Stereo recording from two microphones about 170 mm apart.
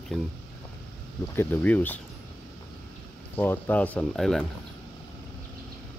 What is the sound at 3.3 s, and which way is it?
Speech, 10° left (ahead or behind).